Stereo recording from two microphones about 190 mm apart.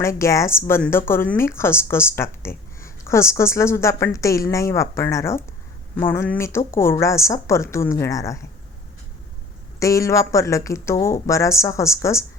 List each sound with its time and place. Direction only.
0.0 s speech: 15° left (ahead or behind)
9.8 s speech: 15° left (ahead or behind)